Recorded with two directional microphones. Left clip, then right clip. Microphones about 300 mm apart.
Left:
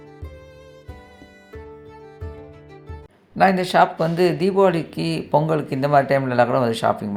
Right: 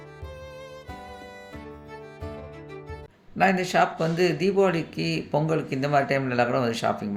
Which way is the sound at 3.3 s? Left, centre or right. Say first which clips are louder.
Left 6 dB; centre.